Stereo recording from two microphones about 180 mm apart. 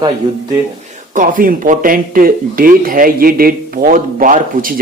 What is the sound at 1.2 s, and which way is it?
Speech, 50° right (ahead or behind).